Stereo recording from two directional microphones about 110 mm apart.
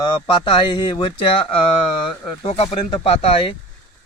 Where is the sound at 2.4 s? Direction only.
60° left (ahead or behind).